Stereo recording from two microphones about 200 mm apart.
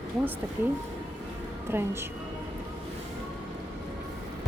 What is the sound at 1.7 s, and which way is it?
Speech, 10° right (ahead or behind).